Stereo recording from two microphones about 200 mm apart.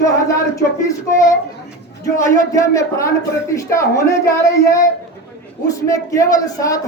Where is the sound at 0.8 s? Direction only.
15° left (ahead or behind).